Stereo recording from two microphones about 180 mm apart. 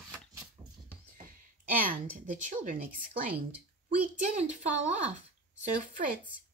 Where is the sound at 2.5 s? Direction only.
45° right (ahead or behind).